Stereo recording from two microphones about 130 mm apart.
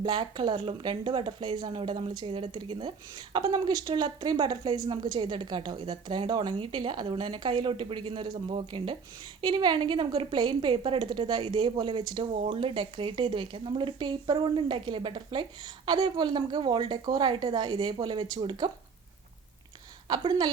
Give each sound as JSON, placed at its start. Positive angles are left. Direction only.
{"t": 0.0, "sound": "speech", "side_deg": -35}
{"t": 20.1, "sound": "speech", "side_deg": -35}